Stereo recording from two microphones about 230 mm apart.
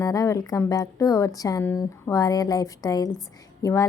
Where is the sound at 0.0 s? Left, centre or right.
Centre.